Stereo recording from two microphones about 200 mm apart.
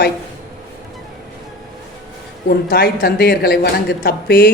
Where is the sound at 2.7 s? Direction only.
50° left (ahead or behind).